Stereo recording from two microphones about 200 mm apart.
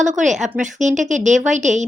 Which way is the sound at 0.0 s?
40° right (ahead or behind).